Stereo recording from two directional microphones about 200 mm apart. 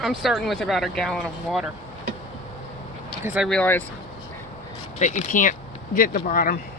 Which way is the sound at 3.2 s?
10° right (ahead or behind).